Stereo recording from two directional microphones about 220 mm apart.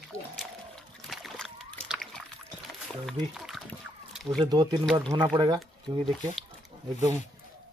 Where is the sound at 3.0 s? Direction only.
Centre (ahead or behind).